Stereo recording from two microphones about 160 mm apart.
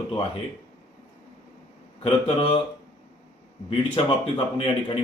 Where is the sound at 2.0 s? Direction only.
30° left (ahead or behind).